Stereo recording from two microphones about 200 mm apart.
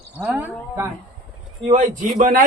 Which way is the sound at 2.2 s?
45° right (ahead or behind).